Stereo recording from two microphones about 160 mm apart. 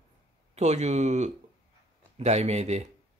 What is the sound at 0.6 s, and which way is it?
A man's voice, 45° right (ahead or behind).